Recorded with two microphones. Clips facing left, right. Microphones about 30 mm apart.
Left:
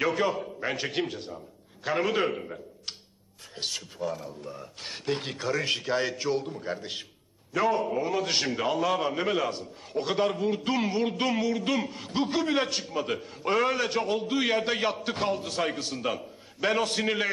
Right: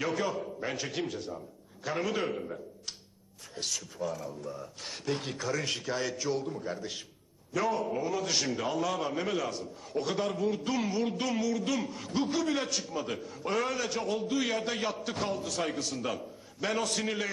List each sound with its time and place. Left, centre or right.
0.0 s a man's voice: left